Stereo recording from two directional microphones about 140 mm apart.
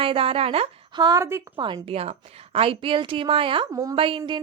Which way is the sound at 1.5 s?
35° right (ahead or behind).